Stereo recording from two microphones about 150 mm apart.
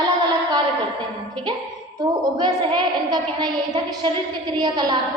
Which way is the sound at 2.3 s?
30° right (ahead or behind).